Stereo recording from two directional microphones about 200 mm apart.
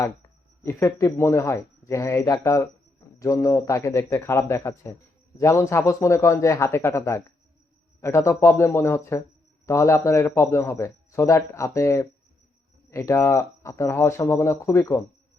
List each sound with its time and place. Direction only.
0.6 s a man's voice: 15° left (ahead or behind)